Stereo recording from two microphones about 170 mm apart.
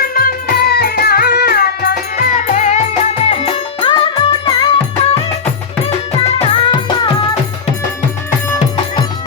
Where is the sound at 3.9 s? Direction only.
25° left (ahead or behind).